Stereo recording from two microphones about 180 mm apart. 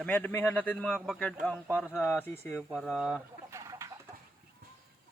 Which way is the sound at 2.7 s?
Centre (ahead or behind).